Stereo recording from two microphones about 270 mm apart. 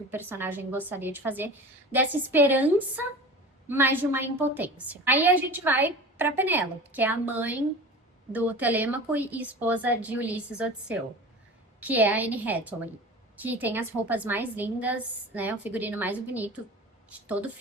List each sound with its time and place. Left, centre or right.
0.1 s a woman's voice: centre